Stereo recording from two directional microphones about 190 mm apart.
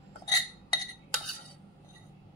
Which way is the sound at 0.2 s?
20° left (ahead or behind).